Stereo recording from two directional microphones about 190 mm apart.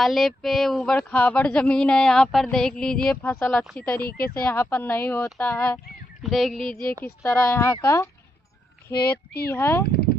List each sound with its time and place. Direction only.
0.0 s speech: centre (ahead or behind)